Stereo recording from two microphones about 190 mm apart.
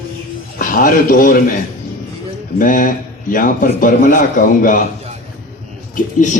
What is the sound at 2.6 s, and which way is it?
A man's voice, 45° left (ahead or behind).